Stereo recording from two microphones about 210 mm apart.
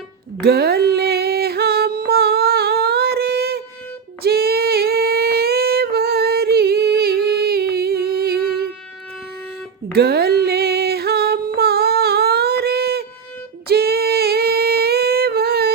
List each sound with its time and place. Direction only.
0.4 s a sound: 50° right (ahead or behind)
4.2 s female singing: 50° right (ahead or behind)
9.9 s music: 50° right (ahead or behind)
13.7 s humming: 50° right (ahead or behind)